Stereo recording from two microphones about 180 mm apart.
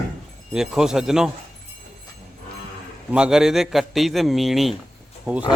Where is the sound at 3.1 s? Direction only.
5° right (ahead or behind).